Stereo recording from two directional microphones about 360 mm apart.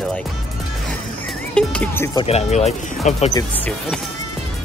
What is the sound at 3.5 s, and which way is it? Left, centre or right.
Speech, centre.